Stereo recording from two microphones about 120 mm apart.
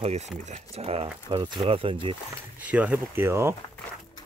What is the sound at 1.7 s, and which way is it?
Speech, 50° right (ahead or behind).